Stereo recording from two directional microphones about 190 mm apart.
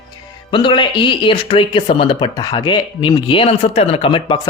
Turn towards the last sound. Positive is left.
turn(degrees=25)  # may be behind; listen again after turning